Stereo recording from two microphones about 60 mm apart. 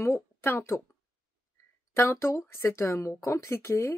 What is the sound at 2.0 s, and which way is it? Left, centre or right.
Speech, left.